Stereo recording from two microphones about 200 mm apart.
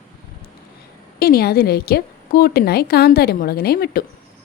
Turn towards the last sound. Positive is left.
turn(degrees=50)  # may be behind; listen again after turning